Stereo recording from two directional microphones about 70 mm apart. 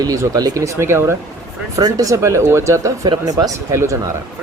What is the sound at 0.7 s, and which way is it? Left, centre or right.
Speech, right.